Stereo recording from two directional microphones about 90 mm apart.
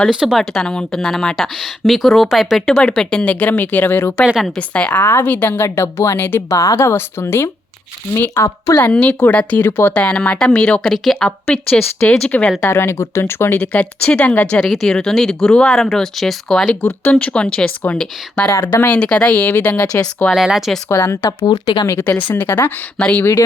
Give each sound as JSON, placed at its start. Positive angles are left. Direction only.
{"t": 0.1, "sound": "a woman's voice", "side_deg": -5}
{"t": 8.8, "sound": "a woman's voice", "side_deg": 15}
{"t": 10.9, "sound": "speech", "side_deg": 0}
{"t": 11.3, "sound": "a woman's voice", "side_deg": 15}
{"t": 12.6, "sound": "a woman's voice", "side_deg": 30}
{"t": 18.4, "sound": "speech", "side_deg": 25}
{"t": 18.9, "sound": "a woman's voice", "side_deg": 10}
{"t": 20.3, "sound": "speech", "side_deg": 0}
{"t": 20.9, "sound": "speech", "side_deg": 30}
{"t": 21.2, "sound": "speech", "side_deg": 55}
{"t": 22.0, "sound": "speech", "side_deg": 20}